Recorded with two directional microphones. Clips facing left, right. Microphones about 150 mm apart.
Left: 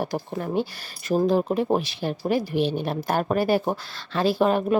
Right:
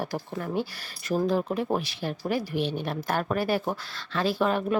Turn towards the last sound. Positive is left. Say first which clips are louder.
# left 4 dB
turn(degrees=30)  # may be behind; listen again after turning